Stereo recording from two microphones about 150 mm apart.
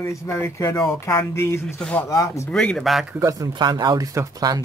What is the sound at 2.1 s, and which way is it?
Speech, 20° left (ahead or behind).